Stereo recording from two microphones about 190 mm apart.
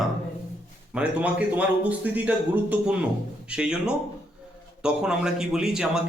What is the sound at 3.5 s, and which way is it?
A man's voice, 5° right (ahead or behind).